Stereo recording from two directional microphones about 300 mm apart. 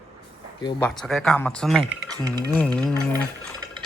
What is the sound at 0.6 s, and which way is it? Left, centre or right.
Speech, centre.